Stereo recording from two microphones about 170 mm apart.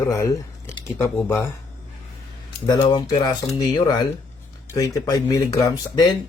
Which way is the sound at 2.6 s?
25° left (ahead or behind).